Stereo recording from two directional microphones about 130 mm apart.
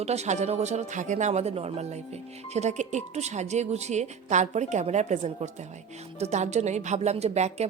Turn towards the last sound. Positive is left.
turn(degrees=-55)  # may be behind; listen again after turning